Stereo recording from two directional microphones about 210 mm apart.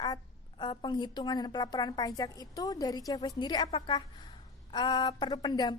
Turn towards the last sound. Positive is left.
turn(degrees=20)  # may be behind; listen again after turning